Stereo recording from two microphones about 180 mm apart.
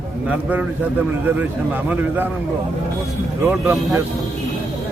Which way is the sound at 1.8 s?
10° right (ahead or behind).